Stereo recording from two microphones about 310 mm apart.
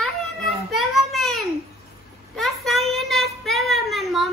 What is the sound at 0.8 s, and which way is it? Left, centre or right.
Child singing, centre.